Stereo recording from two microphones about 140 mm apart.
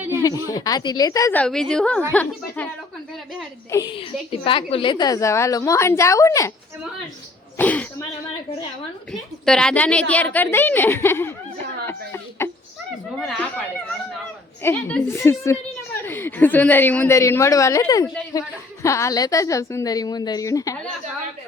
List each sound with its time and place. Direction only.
0.2 s a woman's voice: 25° left (ahead or behind)
1.3 s a woman's voice: 10° left (ahead or behind)
3.7 s a woman's voice: 25° left (ahead or behind)
3.9 s a woman's voice: 40° left (ahead or behind); by 6.5 s 20° left (ahead or behind)
7.6 s a woman's voice: 10° left (ahead or behind)
9.5 s a woman's voice: 5° left (ahead or behind)
11.9 s a sound: 15° left (ahead or behind)
13.1 s chatter: 5° left (ahead or behind)
14.6 s a woman's voice: 15° left (ahead or behind)